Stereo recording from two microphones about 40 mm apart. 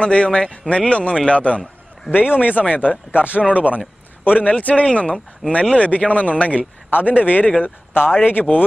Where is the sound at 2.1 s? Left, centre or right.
Centre.